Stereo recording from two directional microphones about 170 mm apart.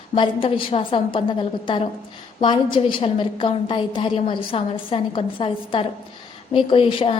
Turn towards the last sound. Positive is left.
turn(degrees=30)  # may be behind; listen again after turning